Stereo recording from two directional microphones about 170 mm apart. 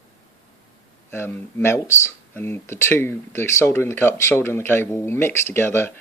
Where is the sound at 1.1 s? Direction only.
10° left (ahead or behind).